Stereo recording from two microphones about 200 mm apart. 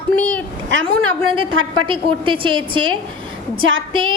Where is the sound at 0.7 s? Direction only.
75° right (ahead or behind).